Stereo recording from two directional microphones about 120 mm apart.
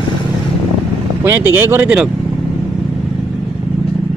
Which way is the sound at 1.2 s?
20° right (ahead or behind).